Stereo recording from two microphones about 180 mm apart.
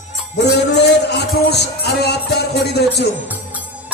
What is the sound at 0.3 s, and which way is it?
Music, 70° left (ahead or behind).